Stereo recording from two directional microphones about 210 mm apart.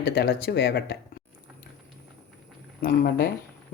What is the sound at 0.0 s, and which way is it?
Speech, 50° left (ahead or behind).